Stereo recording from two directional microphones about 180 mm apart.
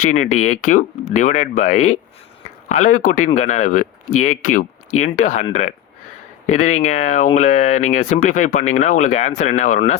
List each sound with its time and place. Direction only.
0.0 s speech: 45° left (ahead or behind)